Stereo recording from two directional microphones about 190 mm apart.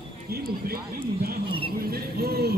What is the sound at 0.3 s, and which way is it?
Speech, 55° right (ahead or behind).